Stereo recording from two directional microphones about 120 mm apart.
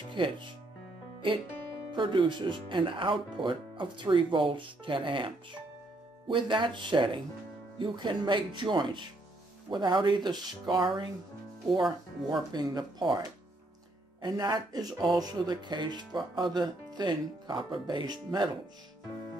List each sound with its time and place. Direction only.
0.1 s speech: 45° right (ahead or behind)
1.9 s speech: 45° right (ahead or behind)
12.3 s speech: 35° right (ahead or behind)
14.2 s speech: 30° right (ahead or behind)